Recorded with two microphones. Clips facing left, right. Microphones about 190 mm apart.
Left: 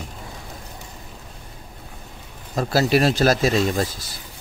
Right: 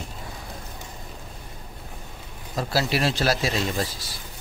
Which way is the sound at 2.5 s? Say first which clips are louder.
Left 6 dB; 50° left (ahead or behind).